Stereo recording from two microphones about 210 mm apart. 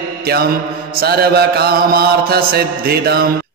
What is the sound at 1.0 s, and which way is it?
Mantra, 50° right (ahead or behind).